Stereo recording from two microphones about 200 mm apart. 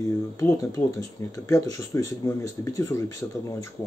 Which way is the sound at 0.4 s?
15° left (ahead or behind).